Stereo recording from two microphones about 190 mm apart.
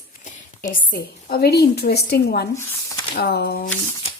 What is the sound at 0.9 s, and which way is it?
A woman's voice, 50° left (ahead or behind).